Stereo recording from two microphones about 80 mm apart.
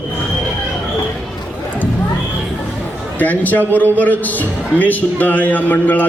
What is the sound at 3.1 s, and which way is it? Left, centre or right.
A man's voice, left.